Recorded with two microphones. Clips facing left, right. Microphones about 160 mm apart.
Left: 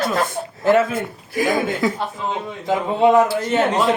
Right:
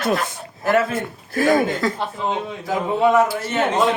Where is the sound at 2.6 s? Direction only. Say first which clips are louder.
Left 3 dB; 25° left (ahead or behind).